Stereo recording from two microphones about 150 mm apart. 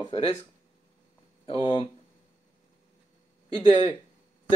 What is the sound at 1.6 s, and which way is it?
Speech, 35° left (ahead or behind).